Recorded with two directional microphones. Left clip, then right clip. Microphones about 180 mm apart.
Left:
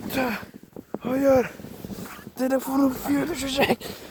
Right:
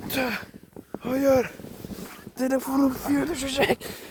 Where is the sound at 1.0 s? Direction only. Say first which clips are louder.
Left 1 dB; 20° left (ahead or behind).